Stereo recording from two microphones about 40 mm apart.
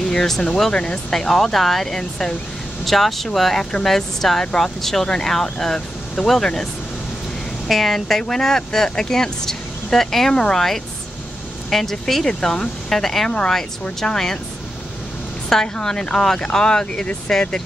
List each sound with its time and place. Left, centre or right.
0.0 s speech: centre
0.7 s speech: left
1.1 s speech: centre
15.5 s speech: centre